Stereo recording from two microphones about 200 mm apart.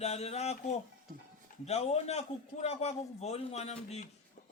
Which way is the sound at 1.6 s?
30° left (ahead or behind).